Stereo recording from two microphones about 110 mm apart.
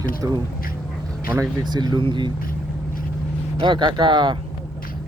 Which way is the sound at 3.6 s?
45° right (ahead or behind).